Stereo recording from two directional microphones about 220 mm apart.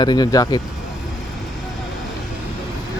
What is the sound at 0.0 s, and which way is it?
Speech, 20° left (ahead or behind).